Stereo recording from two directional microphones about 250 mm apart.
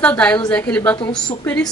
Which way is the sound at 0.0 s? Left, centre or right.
Centre.